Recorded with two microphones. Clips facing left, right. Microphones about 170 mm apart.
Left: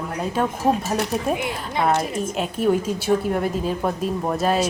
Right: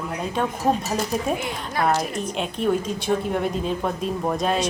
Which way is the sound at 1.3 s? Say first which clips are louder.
Left 2 dB; 15° left (ahead or behind).